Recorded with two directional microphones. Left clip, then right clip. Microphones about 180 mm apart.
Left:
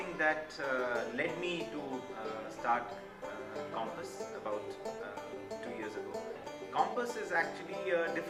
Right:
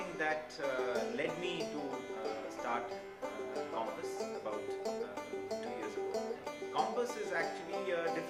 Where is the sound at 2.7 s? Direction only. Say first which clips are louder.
Left 6 dB; 20° right (ahead or behind).